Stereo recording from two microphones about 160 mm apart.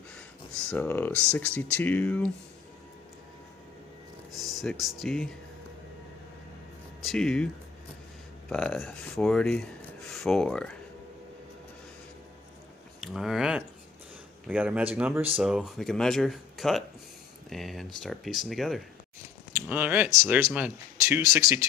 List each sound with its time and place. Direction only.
0.7 s speech: 10° left (ahead or behind)
4.4 s speech: centre (ahead or behind)
7.1 s speech: 5° left (ahead or behind)
13.0 s speech: centre (ahead or behind)
19.5 s speech: 10° right (ahead or behind)